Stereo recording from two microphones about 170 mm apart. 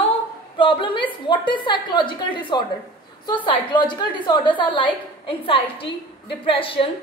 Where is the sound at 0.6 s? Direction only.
30° left (ahead or behind).